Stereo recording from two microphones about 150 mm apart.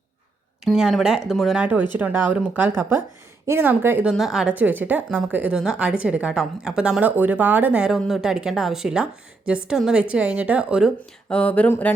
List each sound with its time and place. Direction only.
0.6 s a woman's voice: 5° right (ahead or behind)
4.1 s a woman's voice: centre (ahead or behind)
11.3 s a sound: 10° left (ahead or behind)